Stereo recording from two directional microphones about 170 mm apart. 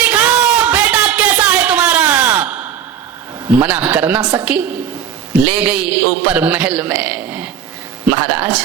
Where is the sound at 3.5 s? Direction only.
10° right (ahead or behind).